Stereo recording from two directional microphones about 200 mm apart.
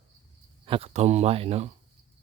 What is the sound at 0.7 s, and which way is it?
Speech, 30° right (ahead or behind).